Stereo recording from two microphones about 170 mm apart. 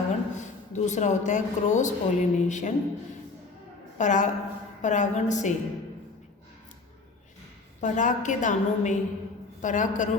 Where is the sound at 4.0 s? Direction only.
45° left (ahead or behind).